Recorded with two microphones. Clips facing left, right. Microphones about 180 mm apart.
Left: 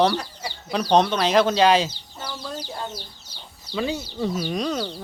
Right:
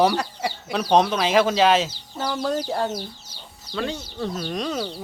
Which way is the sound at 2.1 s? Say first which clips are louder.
Right 11 dB; 75° right (ahead or behind).